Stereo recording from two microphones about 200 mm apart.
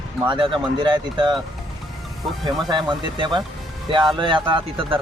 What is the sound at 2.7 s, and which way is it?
Speech, 25° right (ahead or behind).